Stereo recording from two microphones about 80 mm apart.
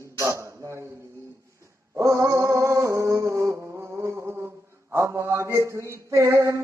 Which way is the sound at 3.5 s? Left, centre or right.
Right.